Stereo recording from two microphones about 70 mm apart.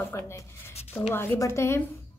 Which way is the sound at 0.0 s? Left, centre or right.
Left.